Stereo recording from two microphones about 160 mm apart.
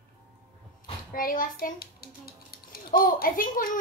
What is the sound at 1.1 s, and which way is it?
A child's voice, 60° left (ahead or behind).